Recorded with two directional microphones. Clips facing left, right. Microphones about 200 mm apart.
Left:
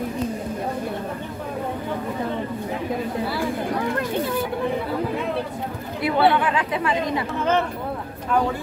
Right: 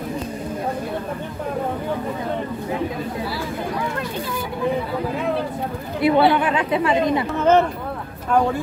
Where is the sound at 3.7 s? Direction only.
55° left (ahead or behind).